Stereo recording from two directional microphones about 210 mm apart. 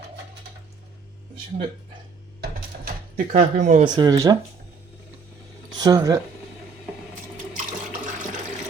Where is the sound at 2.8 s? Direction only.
35° right (ahead or behind).